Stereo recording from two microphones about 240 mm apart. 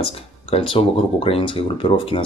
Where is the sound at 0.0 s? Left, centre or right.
Left.